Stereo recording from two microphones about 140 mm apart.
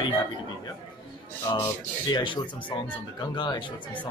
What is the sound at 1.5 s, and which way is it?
Speech, 20° left (ahead or behind).